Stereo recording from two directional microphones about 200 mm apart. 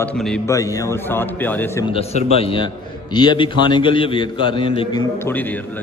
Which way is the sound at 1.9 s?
30° left (ahead or behind).